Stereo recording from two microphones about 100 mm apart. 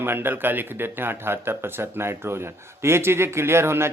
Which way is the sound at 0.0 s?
20° right (ahead or behind).